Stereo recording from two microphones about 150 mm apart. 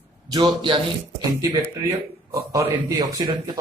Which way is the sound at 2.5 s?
20° right (ahead or behind).